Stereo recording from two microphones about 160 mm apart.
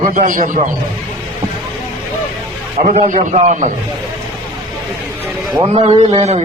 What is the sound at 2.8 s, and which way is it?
Speech, 45° right (ahead or behind).